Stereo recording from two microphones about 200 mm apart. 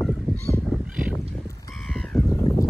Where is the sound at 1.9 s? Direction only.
5° left (ahead or behind).